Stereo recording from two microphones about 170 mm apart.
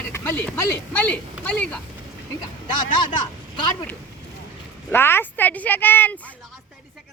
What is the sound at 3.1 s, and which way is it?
Speech, 25° left (ahead or behind).